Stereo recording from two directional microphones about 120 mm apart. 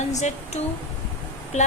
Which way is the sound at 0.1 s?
75° left (ahead or behind).